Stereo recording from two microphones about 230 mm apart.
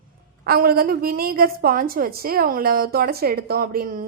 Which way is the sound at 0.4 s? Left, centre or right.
Right.